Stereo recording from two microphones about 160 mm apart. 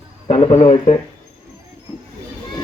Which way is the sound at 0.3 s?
40° left (ahead or behind).